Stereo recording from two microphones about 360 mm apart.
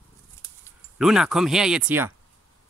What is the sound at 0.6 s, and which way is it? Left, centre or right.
Speech, centre.